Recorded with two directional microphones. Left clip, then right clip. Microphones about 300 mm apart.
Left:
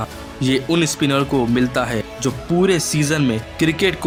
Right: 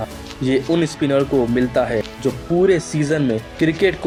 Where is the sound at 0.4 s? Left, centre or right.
Left.